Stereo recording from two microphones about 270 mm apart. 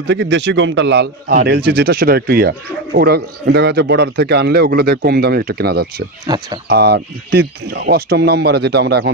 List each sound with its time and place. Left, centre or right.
0.0 s speech: right
6.2 s speech: centre
6.7 s speech: right